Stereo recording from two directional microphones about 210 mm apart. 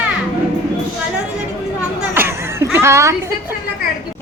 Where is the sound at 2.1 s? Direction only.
10° right (ahead or behind).